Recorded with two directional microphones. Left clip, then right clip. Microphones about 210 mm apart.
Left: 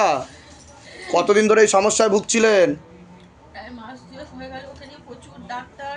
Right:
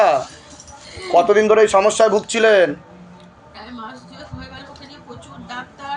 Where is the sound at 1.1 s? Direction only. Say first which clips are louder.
Right 3 dB; 45° left (ahead or behind).